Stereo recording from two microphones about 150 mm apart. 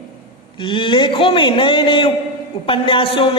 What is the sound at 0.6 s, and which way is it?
A man's voice, 30° left (ahead or behind).